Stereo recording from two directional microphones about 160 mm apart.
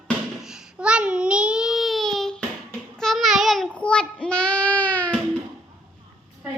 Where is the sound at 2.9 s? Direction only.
Centre (ahead or behind).